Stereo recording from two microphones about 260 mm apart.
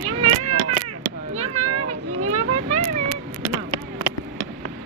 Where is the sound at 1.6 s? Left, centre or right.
Right.